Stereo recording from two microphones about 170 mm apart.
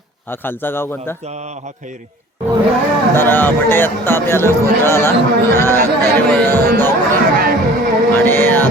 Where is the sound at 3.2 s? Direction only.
10° left (ahead or behind).